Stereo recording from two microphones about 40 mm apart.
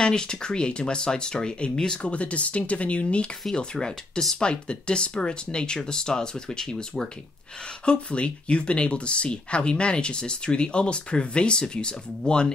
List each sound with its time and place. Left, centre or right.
0.0 s speech: centre
2.0 s speech: left
4.4 s speech: left